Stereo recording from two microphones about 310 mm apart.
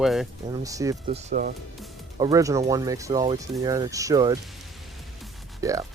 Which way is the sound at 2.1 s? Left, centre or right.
Centre.